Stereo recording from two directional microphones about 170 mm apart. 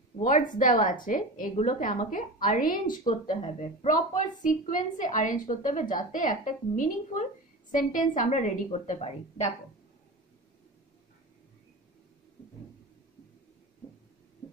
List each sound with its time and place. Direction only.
0.2 s a woman's voice: 50° left (ahead or behind)